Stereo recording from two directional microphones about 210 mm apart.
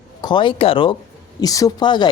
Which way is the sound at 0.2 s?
20° left (ahead or behind).